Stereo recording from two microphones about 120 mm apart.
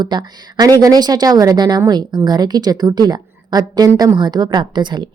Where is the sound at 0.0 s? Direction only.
35° right (ahead or behind).